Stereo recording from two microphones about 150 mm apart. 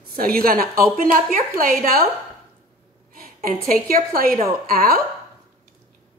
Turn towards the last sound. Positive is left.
turn(degrees=-75)  # may be behind; listen again after turning